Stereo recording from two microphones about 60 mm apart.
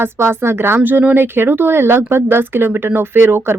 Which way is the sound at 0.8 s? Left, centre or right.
Right.